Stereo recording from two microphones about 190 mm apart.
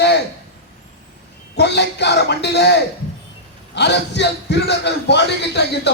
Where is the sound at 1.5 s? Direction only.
65° left (ahead or behind).